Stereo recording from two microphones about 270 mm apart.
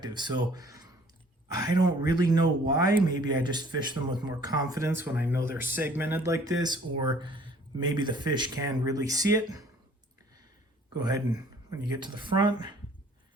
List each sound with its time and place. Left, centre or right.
0.0 s speech: centre
11.7 s speech: centre